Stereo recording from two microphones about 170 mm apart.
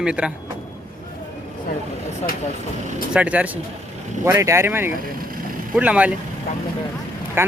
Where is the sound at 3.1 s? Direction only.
10° right (ahead or behind).